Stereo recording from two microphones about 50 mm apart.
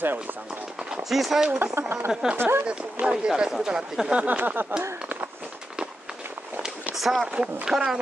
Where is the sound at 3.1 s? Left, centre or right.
Centre.